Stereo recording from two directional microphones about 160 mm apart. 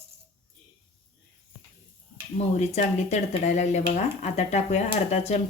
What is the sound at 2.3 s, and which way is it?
A woman's voice, 45° left (ahead or behind).